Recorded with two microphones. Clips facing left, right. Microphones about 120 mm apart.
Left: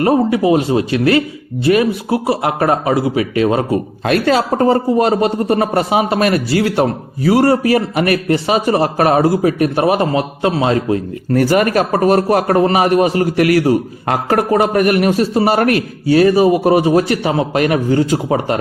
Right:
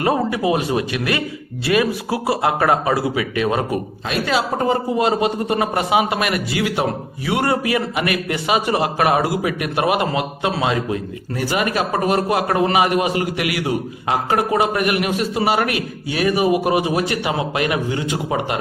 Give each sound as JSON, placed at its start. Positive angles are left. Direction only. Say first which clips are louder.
{"t": 0.0, "sound": "speech", "louder": "left 6 dB", "side_deg": 25}
{"t": 4.0, "sound": "a man's voice", "louder": "left 7 dB", "side_deg": 45}
{"t": 11.3, "sound": "a man's voice", "louder": "left 8 dB", "side_deg": 45}
{"t": 16.1, "sound": "a man's voice", "louder": "left 7 dB", "side_deg": 35}